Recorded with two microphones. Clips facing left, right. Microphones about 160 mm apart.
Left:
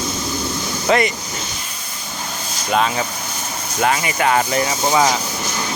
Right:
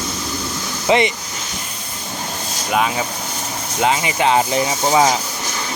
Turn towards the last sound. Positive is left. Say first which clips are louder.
# right 1 dB
turn(degrees=-15)  # may be behind; listen again after turning